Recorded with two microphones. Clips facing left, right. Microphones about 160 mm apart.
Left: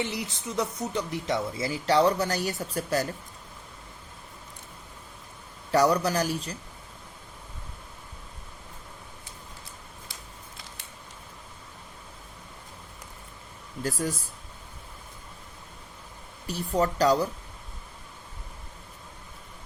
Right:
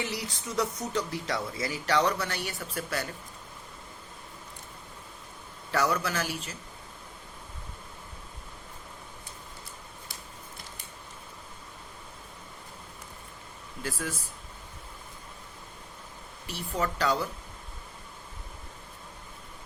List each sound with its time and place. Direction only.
0.1 s speech: 20° left (ahead or behind); by 3.1 s 40° left (ahead or behind)
5.7 s speech: 35° left (ahead or behind)
13.8 s speech: 40° left (ahead or behind)
16.5 s speech: 40° left (ahead or behind)